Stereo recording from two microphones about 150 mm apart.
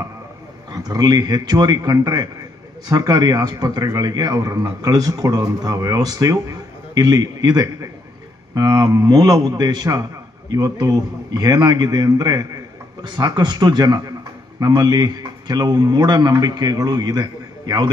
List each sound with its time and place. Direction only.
0.7 s a man's voice: 25° right (ahead or behind)